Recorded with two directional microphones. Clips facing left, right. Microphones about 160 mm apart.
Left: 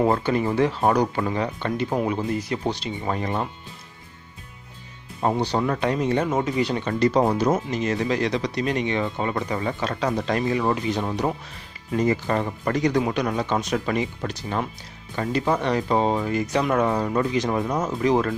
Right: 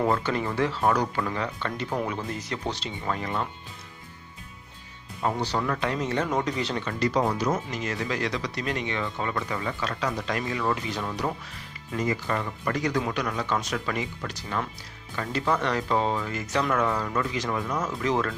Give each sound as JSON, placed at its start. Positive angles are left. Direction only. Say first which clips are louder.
{"t": 0.0, "sound": "speech", "louder": "left 4 dB", "side_deg": 15}
{"t": 3.1, "sound": "speech", "louder": "left 3 dB", "side_deg": 25}
{"t": 5.4, "sound": "speech", "louder": "left 4 dB", "side_deg": 20}
{"t": 6.8, "sound": "speech", "louder": "left 5 dB", "side_deg": 30}
{"t": 17.6, "sound": "speech", "louder": "left 5 dB", "side_deg": 40}
{"t": 17.8, "sound": "speech", "louder": "left 6 dB", "side_deg": 20}